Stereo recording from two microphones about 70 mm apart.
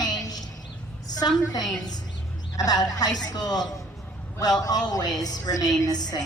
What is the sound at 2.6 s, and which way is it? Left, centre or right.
Speech, left.